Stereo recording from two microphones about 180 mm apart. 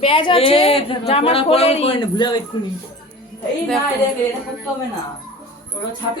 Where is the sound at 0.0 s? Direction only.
30° left (ahead or behind).